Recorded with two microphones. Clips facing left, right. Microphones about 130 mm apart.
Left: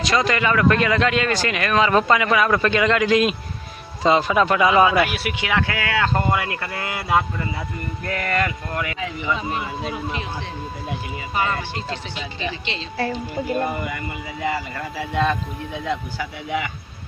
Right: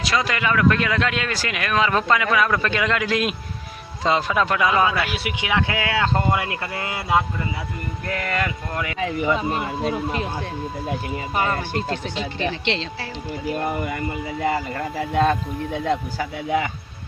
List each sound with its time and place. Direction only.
0.0 s a man's voice: 5° right (ahead or behind); by 5.1 s 15° left (ahead or behind)
5.1 s speech: 20° right (ahead or behind)
9.0 s speech: 45° right (ahead or behind)
11.3 s speech: 45° right (ahead or behind); by 12.8 s 65° right (ahead or behind)
13.8 s speech: 35° right (ahead or behind)